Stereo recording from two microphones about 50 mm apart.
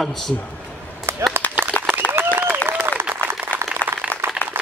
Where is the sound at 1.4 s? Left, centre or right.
Left.